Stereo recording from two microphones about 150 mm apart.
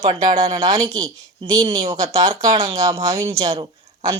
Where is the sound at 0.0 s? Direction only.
40° right (ahead or behind).